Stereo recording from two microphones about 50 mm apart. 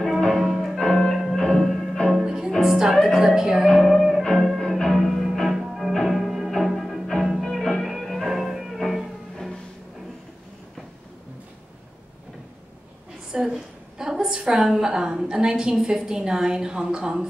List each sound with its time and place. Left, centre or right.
0.4 s music: centre
0.7 s music: centre
2.1 s music: centre
3.6 s music: centre
13.3 s a sound: centre
15.2 s a woman's voice: centre